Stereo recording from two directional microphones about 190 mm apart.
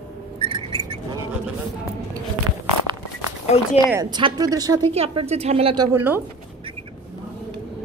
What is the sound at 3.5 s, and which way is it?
Speech, 35° left (ahead or behind).